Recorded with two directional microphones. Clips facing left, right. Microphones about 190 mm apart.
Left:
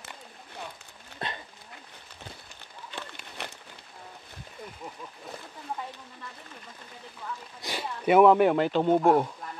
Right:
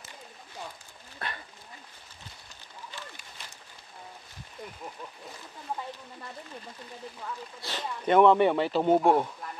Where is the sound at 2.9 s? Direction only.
65° left (ahead or behind).